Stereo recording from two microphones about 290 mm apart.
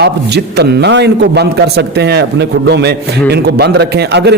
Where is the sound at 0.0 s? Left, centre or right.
Right.